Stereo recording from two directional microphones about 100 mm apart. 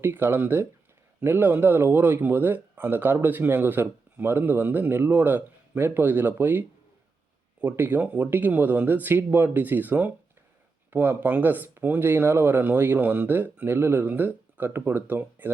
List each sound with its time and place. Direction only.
0.0 s speech: 20° right (ahead or behind)